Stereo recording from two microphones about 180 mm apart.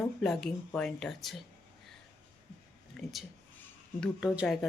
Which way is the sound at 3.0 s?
Centre (ahead or behind).